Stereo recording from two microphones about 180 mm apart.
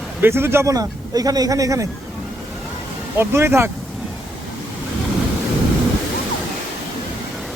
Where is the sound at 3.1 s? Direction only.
15° right (ahead or behind).